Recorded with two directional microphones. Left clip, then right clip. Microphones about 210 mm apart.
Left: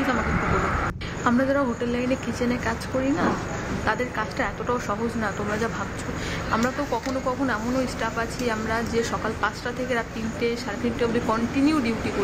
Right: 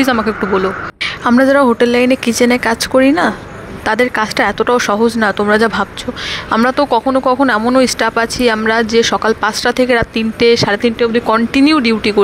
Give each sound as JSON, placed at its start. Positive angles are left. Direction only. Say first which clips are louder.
{"t": 1.2, "sound": "speech", "louder": "right 12 dB", "side_deg": -45}